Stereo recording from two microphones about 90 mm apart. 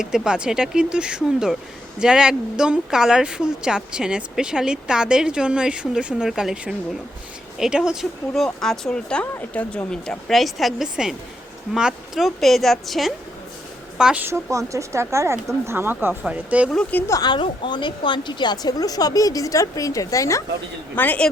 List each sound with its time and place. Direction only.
0.0 s speech: 10° right (ahead or behind)
8.6 s a woman's voice: 5° left (ahead or behind)
14.0 s speech: 10° right (ahead or behind)
14.3 s speech: 30° right (ahead or behind); by 16.6 s 15° right (ahead or behind)
16.9 s a woman's voice: 20° left (ahead or behind)
17.2 s speech: 65° left (ahead or behind); by 20.4 s 35° left (ahead or behind)
20.9 s a woman's voice: 20° left (ahead or behind)